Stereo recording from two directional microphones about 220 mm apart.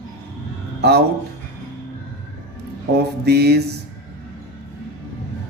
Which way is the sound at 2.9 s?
50° right (ahead or behind).